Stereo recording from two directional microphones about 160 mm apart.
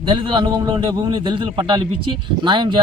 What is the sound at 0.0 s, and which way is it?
A man's voice, 30° right (ahead or behind).